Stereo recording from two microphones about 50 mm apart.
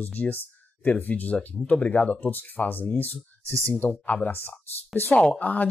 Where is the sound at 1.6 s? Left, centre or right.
Centre.